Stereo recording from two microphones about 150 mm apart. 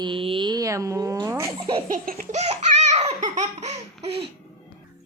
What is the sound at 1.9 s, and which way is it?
Laughter, 65° right (ahead or behind).